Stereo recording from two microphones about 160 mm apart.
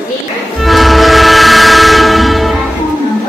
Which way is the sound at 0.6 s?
Centre (ahead or behind).